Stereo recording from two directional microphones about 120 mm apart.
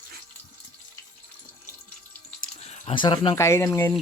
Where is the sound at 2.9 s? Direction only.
40° left (ahead or behind).